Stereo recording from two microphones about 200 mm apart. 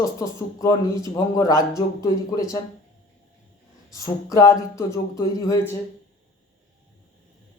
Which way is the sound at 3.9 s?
15° left (ahead or behind).